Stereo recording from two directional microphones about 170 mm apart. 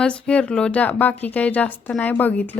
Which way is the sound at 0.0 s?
5° left (ahead or behind).